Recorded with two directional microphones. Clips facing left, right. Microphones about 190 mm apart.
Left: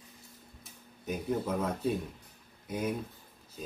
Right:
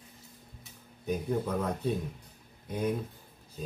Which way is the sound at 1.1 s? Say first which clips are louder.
Right 1 dB; 5° left (ahead or behind).